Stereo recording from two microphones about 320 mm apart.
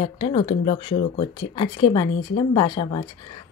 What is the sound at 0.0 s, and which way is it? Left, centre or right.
Speech, centre.